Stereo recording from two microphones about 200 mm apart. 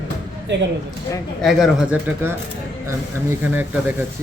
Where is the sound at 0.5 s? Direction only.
60° right (ahead or behind).